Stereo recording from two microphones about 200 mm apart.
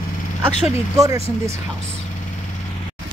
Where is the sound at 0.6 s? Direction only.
15° right (ahead or behind).